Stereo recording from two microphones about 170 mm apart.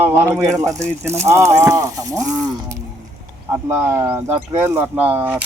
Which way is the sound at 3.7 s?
15° right (ahead or behind).